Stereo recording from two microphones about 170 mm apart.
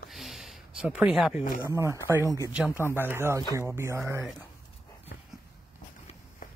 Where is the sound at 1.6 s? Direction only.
15° right (ahead or behind).